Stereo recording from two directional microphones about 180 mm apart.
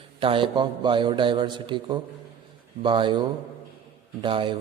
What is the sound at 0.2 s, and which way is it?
A man's voice, 30° right (ahead or behind).